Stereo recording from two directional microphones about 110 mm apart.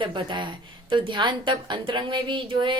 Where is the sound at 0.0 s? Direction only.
45° right (ahead or behind).